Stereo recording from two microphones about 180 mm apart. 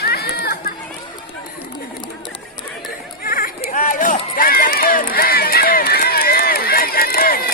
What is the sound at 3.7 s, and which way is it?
Run, 50° left (ahead or behind).